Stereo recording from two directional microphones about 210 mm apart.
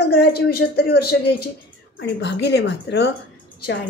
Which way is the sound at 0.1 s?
50° left (ahead or behind).